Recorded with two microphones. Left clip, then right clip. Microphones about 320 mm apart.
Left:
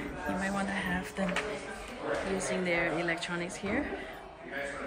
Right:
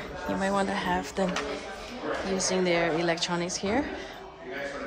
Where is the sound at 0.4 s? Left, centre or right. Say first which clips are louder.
Right 8 dB; centre.